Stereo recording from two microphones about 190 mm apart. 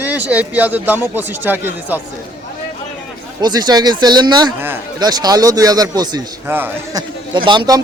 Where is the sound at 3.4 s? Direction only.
20° right (ahead or behind).